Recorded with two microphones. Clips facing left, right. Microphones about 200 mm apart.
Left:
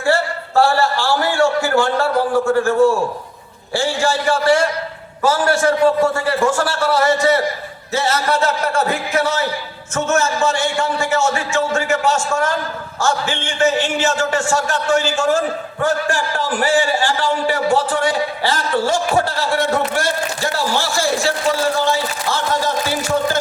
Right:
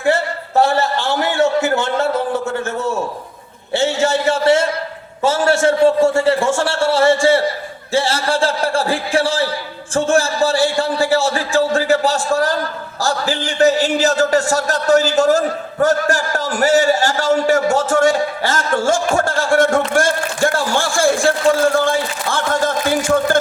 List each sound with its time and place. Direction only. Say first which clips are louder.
0.0 s a man's voice: right 1 dB; 20° right (ahead or behind); by 23.4 s 50° right (ahead or behind)